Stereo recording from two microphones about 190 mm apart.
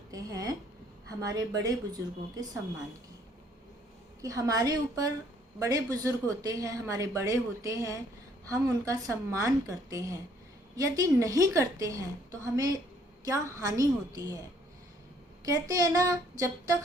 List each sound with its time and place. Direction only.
0.1 s a sound: 20° right (ahead or behind)
1.2 s a woman's voice: 20° right (ahead or behind)
4.2 s a woman's voice: 20° right (ahead or behind)
15.5 s speech: 20° right (ahead or behind)